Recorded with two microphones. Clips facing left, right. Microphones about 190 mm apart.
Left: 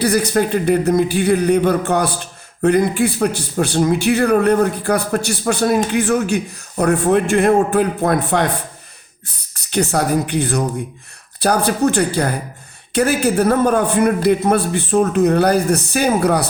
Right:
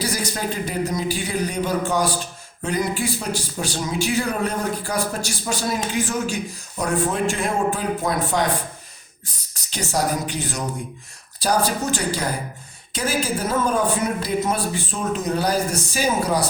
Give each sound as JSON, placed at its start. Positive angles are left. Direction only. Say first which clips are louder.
{"t": 0.0, "sound": "a man's voice", "louder": "left 10 dB", "side_deg": 60}
{"t": 9.6, "sound": "a man's voice", "louder": "left 6 dB", "side_deg": 60}